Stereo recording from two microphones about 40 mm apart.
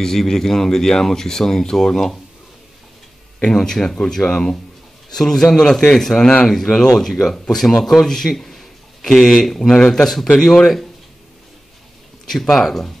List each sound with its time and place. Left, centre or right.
0.0 s speech: centre
3.5 s speech: centre
5.6 s a man's voice: centre
12.3 s speech: centre